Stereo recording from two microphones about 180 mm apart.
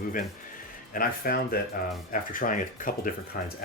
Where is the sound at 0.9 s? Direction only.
55° left (ahead or behind).